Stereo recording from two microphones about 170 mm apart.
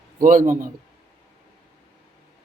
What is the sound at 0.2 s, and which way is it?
Speech, 55° right (ahead or behind).